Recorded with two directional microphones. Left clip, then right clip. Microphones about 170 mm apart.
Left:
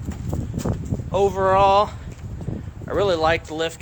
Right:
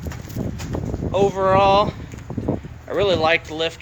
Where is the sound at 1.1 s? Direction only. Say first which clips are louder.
Right 1 dB; 15° left (ahead or behind).